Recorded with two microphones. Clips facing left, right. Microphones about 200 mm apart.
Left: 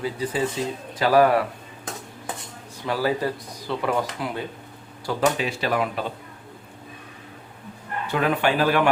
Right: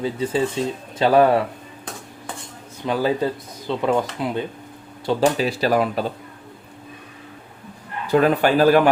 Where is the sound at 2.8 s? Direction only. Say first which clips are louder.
Right 3 dB; 20° right (ahead or behind).